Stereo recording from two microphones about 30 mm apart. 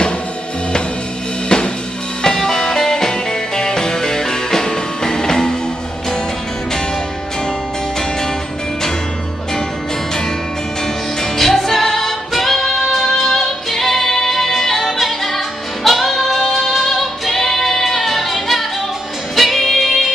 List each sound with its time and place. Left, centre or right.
1.5 s drum: left
2.2 s music: left
11.3 s music: centre
12.9 s singing: centre
19.3 s music: centre